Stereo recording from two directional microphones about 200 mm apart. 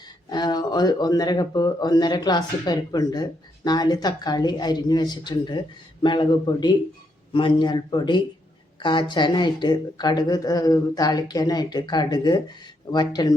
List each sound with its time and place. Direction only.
0.3 s speech: 20° left (ahead or behind)